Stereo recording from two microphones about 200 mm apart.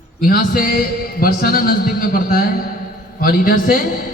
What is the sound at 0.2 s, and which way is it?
A man's voice, 45° left (ahead or behind).